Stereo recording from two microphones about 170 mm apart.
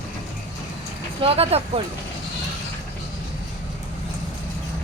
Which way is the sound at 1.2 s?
35° right (ahead or behind).